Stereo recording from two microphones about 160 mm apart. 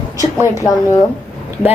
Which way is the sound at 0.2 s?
20° left (ahead or behind).